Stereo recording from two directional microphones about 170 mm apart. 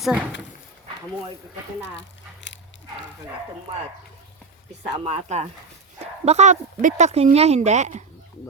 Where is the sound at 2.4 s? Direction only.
90° left.